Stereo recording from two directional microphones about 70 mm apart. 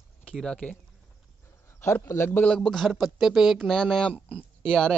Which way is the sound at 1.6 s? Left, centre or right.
Left.